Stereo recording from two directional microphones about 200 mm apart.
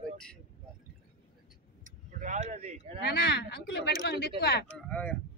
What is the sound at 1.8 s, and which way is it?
Speech, 40° right (ahead or behind).